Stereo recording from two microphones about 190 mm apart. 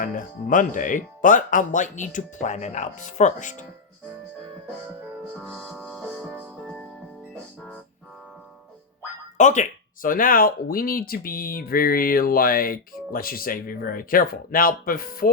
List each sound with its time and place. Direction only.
0.0 s speech: 45° left (ahead or behind)
5.4 s music: centre (ahead or behind)
9.4 s speech: 40° left (ahead or behind)